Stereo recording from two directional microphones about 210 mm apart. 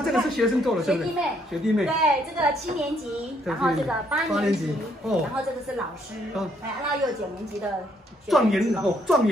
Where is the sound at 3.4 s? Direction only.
5° right (ahead or behind).